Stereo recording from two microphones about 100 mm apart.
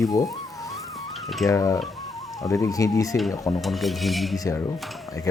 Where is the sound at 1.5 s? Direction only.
35° left (ahead or behind).